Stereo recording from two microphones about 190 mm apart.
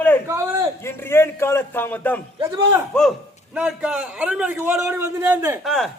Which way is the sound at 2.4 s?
15° right (ahead or behind).